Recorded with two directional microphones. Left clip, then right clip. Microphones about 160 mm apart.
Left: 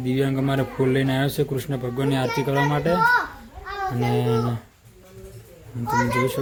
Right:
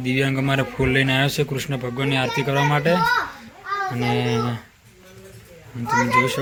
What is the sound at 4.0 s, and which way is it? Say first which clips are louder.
Speech: left 3 dB; 20° left (ahead or behind).